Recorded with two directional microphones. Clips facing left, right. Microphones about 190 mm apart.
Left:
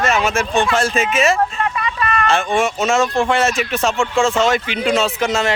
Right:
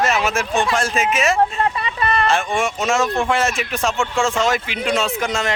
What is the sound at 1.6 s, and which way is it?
Vehicle, 30° right (ahead or behind).